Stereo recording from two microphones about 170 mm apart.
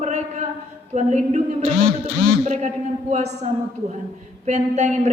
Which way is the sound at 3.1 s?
40° right (ahead or behind).